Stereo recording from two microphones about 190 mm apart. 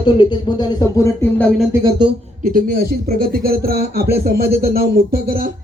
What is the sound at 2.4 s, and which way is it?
Speech, 45° right (ahead or behind).